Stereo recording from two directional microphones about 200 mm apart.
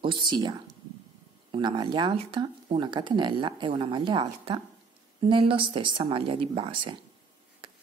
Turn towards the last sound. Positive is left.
turn(degrees=-25)  # may be behind; listen again after turning